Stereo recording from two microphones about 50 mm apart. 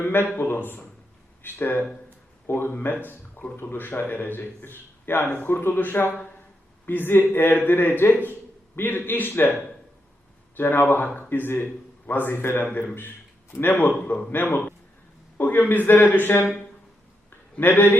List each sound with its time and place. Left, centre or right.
0.0 s a man's voice: left
10.6 s a man's voice: left
17.6 s a man's voice: left